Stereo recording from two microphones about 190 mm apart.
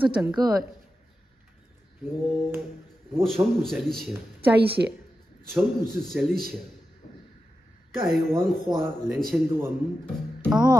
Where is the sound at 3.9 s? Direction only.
Centre (ahead or behind).